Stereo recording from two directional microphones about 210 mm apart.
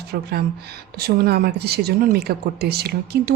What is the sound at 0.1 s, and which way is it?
Speech, 50° right (ahead or behind).